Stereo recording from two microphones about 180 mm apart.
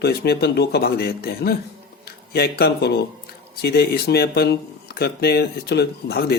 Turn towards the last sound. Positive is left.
turn(degrees=65)  # may be behind; listen again after turning